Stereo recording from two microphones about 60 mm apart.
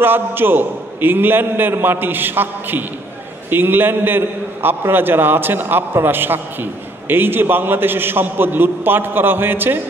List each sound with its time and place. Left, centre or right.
0.0 s a man's voice: right